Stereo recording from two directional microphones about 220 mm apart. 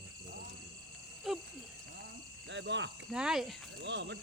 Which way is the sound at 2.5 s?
55° right (ahead or behind).